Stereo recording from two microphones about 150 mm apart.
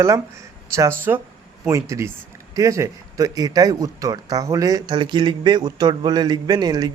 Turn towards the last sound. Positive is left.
turn(degrees=-25)  # may be behind; listen again after turning